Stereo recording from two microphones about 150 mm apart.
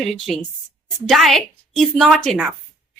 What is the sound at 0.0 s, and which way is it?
Speech, centre (ahead or behind).